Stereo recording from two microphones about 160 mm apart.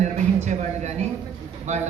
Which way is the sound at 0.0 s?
45° right (ahead or behind).